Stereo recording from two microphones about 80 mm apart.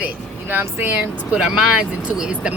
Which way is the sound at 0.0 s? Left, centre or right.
Right.